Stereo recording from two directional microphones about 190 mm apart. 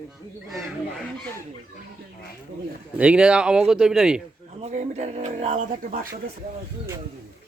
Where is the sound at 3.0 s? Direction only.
5° right (ahead or behind).